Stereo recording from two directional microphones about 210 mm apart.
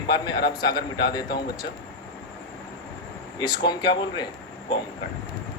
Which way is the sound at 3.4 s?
20° left (ahead or behind).